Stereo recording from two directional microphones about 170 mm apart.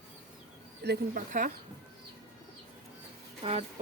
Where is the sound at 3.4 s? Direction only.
30° right (ahead or behind).